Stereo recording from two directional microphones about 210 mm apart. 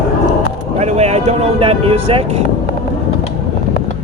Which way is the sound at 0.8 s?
30° right (ahead or behind).